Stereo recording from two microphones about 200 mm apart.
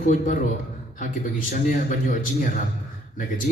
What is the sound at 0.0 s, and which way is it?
Speech, 40° left (ahead or behind).